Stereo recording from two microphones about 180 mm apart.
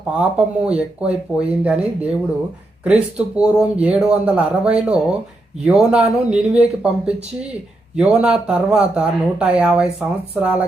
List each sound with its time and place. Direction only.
0.2 s speech: 5° right (ahead or behind)